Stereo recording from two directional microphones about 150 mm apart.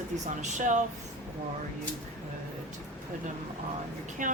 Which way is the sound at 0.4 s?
55° right (ahead or behind).